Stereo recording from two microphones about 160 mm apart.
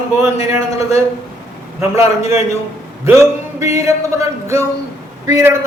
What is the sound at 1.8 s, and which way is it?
Speech, 15° right (ahead or behind).